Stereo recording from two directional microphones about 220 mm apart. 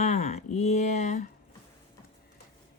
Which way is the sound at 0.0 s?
30° left (ahead or behind).